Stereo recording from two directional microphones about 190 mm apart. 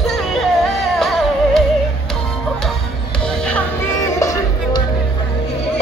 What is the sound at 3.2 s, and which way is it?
Music, 5° left (ahead or behind).